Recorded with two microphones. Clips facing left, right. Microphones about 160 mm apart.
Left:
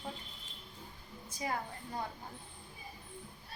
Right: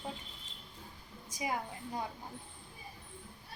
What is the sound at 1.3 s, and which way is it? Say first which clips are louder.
Speech: right 1 dB; 10° right (ahead or behind).